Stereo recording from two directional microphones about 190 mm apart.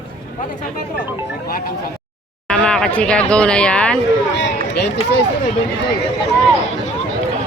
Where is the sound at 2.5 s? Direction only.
5° left (ahead or behind).